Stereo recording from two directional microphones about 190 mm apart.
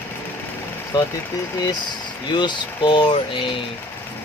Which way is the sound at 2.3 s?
25° left (ahead or behind).